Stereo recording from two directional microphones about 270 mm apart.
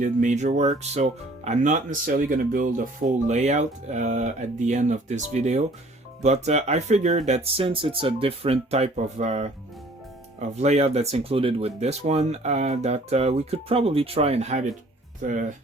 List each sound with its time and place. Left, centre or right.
0.0 s speech: right
10.6 s speech: right